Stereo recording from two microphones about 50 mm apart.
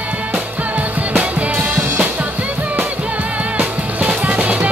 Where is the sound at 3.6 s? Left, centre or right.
Right.